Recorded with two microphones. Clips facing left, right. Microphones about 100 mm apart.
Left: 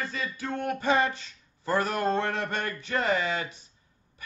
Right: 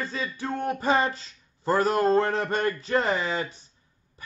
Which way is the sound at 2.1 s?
35° right (ahead or behind).